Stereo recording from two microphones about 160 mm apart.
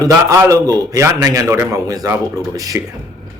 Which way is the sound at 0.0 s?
20° right (ahead or behind).